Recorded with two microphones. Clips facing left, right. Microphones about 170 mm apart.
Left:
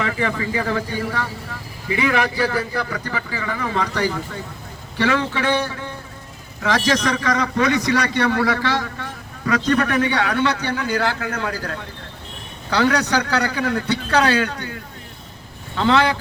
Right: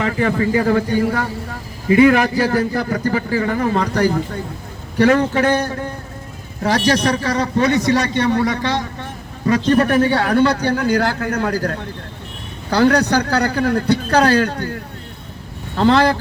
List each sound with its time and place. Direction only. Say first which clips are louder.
0.0 s a man's voice: right 5 dB; 45° right (ahead or behind)
6.6 s a man's voice: right 3 dB; 35° right (ahead or behind)
13.0 s a man's voice: right 4 dB; 40° right (ahead or behind)
15.8 s a man's voice: right 4 dB; 40° right (ahead or behind)